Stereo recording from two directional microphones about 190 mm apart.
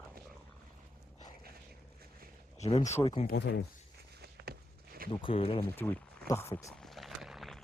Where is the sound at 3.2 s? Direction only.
60° left (ahead or behind).